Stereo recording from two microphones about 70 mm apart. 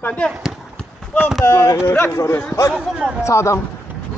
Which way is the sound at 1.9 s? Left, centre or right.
Left.